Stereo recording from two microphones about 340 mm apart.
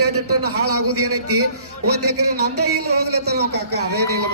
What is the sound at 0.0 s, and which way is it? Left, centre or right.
A man's voice, right.